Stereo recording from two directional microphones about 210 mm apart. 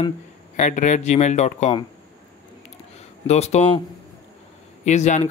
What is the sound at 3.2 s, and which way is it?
Speech, 30° left (ahead or behind).